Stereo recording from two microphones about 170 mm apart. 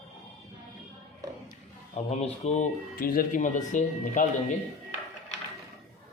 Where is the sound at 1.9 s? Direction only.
40° left (ahead or behind).